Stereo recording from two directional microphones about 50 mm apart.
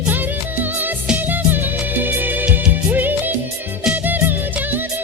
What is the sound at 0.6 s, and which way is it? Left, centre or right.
Music, right.